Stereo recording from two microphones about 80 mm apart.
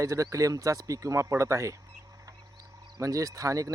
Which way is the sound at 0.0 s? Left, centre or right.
Right.